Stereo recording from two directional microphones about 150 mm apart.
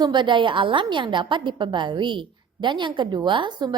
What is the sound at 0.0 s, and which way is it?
A woman's voice, 30° right (ahead or behind).